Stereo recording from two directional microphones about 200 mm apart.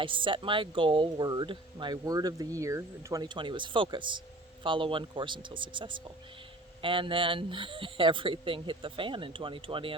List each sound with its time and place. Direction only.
0.0 s speech: 25° right (ahead or behind)